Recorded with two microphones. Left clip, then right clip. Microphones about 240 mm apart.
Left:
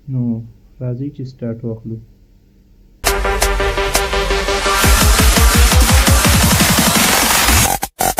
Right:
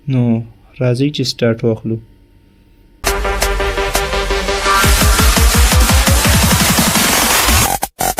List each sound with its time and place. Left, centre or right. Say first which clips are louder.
0.1 s speech: right 6 dB; right
3.0 s music: even; centre